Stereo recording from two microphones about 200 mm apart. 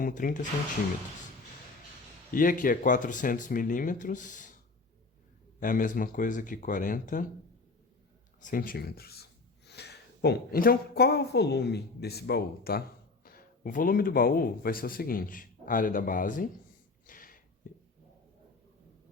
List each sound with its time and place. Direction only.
0.0 s speech: 45° left (ahead or behind)
2.3 s speech: 45° left (ahead or behind)
5.5 s speech: 45° left (ahead or behind)
8.4 s a woman's voice: 40° left (ahead or behind)
17.1 s a sound: 45° left (ahead or behind)